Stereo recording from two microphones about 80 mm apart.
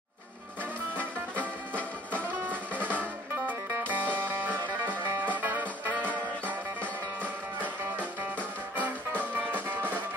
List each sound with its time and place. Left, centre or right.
0.9 s music: centre
2.4 s music: right
9.3 s music: right